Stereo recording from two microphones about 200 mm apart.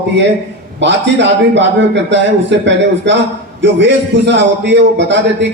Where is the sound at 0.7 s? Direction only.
60° right (ahead or behind).